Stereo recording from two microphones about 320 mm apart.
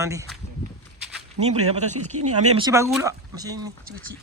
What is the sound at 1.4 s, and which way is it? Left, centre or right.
Speech, centre.